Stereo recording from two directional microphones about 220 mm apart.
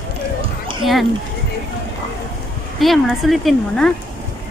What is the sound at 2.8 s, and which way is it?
A woman's voice, centre (ahead or behind).